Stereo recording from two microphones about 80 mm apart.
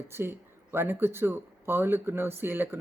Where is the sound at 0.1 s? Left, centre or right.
Right.